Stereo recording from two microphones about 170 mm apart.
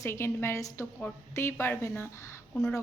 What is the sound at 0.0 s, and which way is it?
A woman's voice, 15° left (ahead or behind).